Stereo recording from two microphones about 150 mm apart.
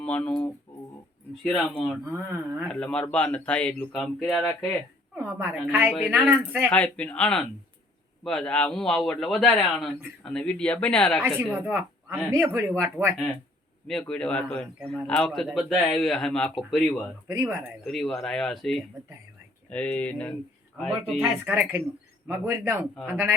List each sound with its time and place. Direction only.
0.0 s speech: 5° left (ahead or behind)
1.5 s speech: 5° left (ahead or behind)
2.0 s speech: 15° right (ahead or behind)
2.6 s speech: 5° left (ahead or behind)
5.1 s a woman's voice: 15° right (ahead or behind)
6.7 s speech: 10° left (ahead or behind)
11.5 s speech: 15° right (ahead or behind)
14.0 s speech: 5° left (ahead or behind)
17.2 s speech: 15° right (ahead or behind)
17.8 s speech: centre (ahead or behind)
21.2 s speech: 15° right (ahead or behind)